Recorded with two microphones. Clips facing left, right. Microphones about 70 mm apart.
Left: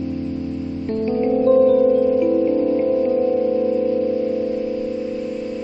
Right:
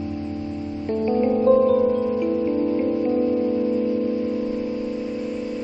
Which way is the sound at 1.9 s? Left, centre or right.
Centre.